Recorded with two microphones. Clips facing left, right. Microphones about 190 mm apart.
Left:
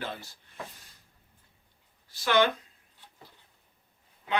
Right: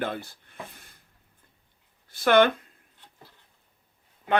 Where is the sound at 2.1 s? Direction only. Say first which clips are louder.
Right 5 dB; 55° right (ahead or behind).